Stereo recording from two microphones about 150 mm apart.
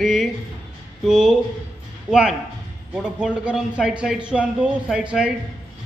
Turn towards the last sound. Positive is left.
turn(degrees=-5)  # may be behind; listen again after turning